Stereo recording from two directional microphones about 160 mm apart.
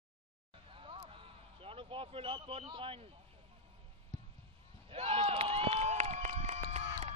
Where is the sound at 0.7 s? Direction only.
35° right (ahead or behind).